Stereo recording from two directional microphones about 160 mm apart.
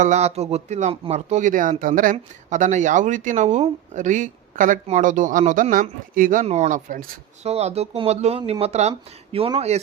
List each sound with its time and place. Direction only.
0.0 s speech: 45° right (ahead or behind)
6.4 s speech: 45° right (ahead or behind)
7.4 s speech: 40° right (ahead or behind)